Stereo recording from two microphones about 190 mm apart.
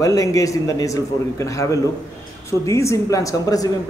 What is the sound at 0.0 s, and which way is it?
A man's voice, 15° left (ahead or behind).